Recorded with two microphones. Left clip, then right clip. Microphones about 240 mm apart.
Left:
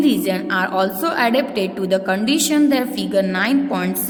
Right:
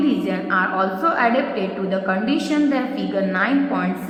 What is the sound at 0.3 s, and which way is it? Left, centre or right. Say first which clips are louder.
A woman's voice: left 1 dB; left.